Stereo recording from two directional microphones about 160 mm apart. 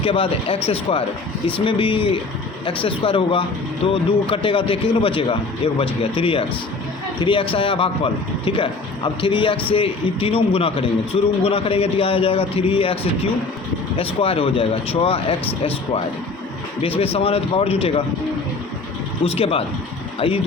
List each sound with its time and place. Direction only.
0.0 s a man's voice: 35° left (ahead or behind)
17.0 s a man's voice: 35° left (ahead or behind)
19.2 s a man's voice: 40° left (ahead or behind)